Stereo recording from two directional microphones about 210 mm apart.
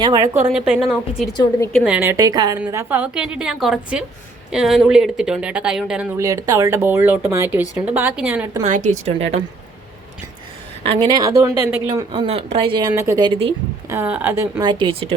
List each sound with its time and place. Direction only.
0.0 s speech: 15° right (ahead or behind)
0.5 s a woman's voice: 5° right (ahead or behind)
8.6 s speech: 35° right (ahead or behind)
10.8 s speech: 25° right (ahead or behind)
12.9 s speech: 15° right (ahead or behind)
13.9 s speech: 10° right (ahead or behind)